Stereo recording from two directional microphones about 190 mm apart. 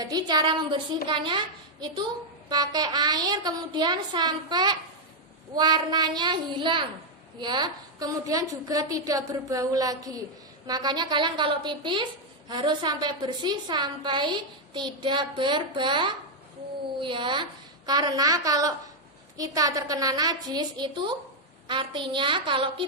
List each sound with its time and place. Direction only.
0.0 s a woman's voice: 20° right (ahead or behind)